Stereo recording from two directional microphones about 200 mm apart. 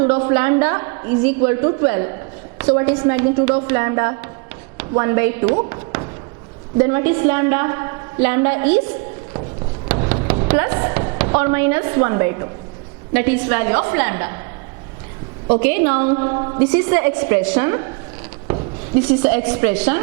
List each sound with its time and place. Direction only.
0.1 s a woman's voice: 15° right (ahead or behind)
5.6 s a sound: 15° right (ahead or behind)
6.7 s a woman's voice: 15° right (ahead or behind)
9.9 s a sound: 15° right (ahead or behind)
10.5 s a woman's voice: 15° right (ahead or behind)
15.6 s a woman's voice: 10° right (ahead or behind)
18.9 s a woman's voice: 10° right (ahead or behind)